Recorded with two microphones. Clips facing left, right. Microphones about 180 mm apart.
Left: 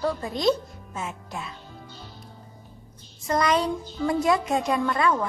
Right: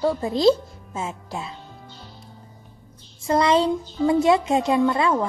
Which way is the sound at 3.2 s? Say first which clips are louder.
Right 4 dB; 25° right (ahead or behind).